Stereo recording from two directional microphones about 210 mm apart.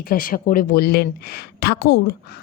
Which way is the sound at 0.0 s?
45° left (ahead or behind).